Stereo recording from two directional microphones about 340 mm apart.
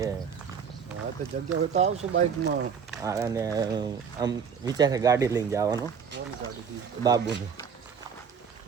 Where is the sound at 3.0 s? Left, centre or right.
Centre.